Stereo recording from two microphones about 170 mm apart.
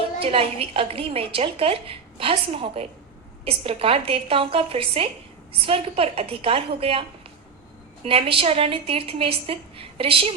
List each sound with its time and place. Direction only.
0.2 s a woman's voice: 35° right (ahead or behind)
8.0 s a woman's voice: 35° right (ahead or behind)